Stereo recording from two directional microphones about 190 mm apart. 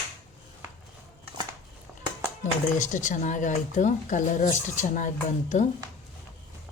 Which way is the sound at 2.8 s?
40° left (ahead or behind).